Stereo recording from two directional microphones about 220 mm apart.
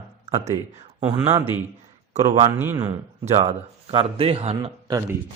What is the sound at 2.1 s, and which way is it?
Speech, 30° right (ahead or behind).